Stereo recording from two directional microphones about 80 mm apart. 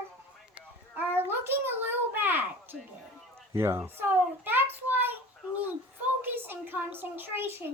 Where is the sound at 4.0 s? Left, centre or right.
Right.